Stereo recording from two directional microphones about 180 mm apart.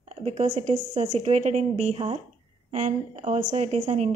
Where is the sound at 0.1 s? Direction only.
40° right (ahead or behind).